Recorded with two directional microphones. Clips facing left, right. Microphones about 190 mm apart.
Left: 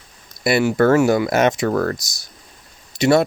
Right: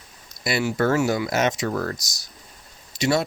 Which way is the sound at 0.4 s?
55° left (ahead or behind).